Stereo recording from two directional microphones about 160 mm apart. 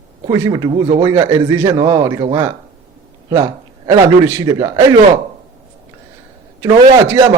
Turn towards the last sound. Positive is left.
turn(degrees=-20)  # may be behind; listen again after turning